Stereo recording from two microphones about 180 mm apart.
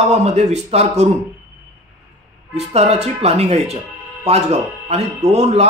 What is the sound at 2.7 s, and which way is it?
Speech, 35° right (ahead or behind).